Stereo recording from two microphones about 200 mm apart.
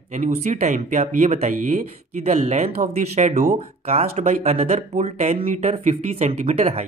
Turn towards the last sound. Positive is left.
turn(degrees=-35)  # may be behind; listen again after turning